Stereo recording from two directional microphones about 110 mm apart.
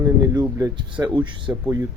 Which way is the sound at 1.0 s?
45° right (ahead or behind).